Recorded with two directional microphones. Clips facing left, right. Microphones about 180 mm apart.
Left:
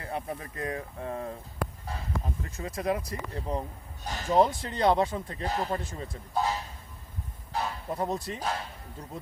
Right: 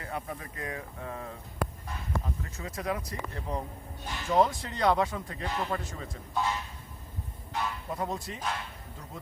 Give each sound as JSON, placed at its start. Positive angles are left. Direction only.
{"t": 0.0, "sound": "speech", "side_deg": 30}
{"t": 4.0, "sound": "speech", "side_deg": 40}
{"t": 4.4, "sound": "speech", "side_deg": 30}